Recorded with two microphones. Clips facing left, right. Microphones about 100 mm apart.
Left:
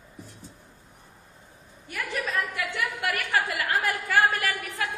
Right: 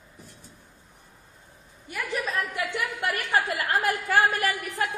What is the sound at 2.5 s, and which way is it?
A woman's voice, 25° right (ahead or behind).